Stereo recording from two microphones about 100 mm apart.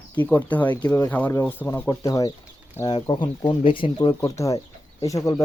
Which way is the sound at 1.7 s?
35° left (ahead or behind).